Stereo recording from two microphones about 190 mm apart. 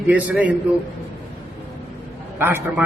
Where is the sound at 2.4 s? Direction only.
10° right (ahead or behind).